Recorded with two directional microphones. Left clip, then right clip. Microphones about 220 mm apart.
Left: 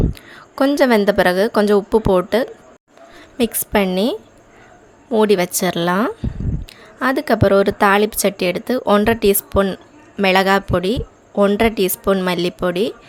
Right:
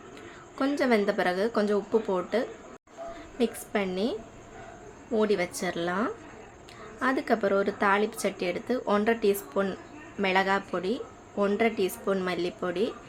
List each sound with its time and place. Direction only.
0.1 s a woman's voice: 45° left (ahead or behind)